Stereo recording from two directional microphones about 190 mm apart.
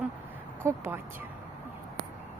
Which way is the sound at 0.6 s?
10° right (ahead or behind).